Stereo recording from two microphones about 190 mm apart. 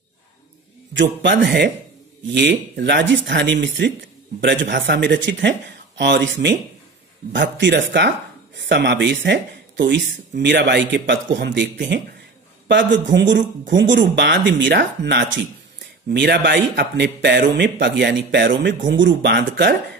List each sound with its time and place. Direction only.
0.9 s a man's voice: 70° right (ahead or behind)